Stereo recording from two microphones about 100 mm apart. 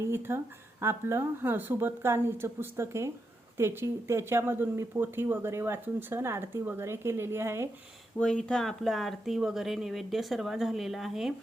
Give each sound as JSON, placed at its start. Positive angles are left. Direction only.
{"t": 0.0, "sound": "speech", "side_deg": -25}
{"t": 8.2, "sound": "speech", "side_deg": 10}